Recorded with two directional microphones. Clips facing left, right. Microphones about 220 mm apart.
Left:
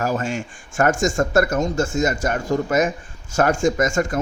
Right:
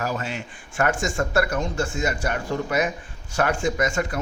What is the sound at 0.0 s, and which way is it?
Speech, 45° left (ahead or behind).